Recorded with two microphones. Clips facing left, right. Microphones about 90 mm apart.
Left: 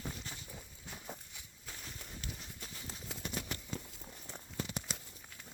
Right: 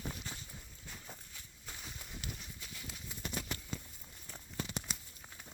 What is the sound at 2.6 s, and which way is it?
Clip-clop, 40° left (ahead or behind).